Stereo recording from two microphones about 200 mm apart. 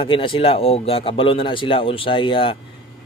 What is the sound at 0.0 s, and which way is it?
A man's voice, 25° left (ahead or behind).